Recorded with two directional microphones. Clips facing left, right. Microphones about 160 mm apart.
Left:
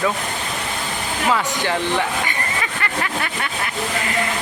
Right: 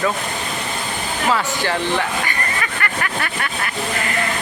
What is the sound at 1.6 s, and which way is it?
Speech, 15° left (ahead or behind).